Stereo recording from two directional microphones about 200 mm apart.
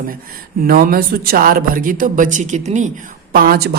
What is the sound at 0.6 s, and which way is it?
A woman's voice, 45° right (ahead or behind).